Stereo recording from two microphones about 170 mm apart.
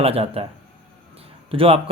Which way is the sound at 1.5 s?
35° right (ahead or behind).